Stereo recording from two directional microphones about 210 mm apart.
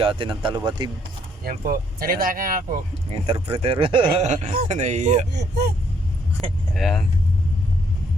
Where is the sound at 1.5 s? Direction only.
45° right (ahead or behind).